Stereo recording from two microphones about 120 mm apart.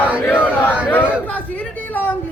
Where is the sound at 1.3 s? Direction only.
10° left (ahead or behind).